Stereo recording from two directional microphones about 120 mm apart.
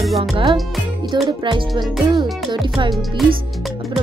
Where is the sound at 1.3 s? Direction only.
40° right (ahead or behind).